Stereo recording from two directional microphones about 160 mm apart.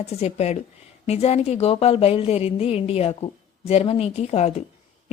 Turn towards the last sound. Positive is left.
turn(degrees=45)  # may be behind; listen again after turning